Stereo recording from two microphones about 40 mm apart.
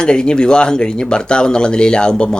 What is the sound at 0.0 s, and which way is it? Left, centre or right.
Speech, left.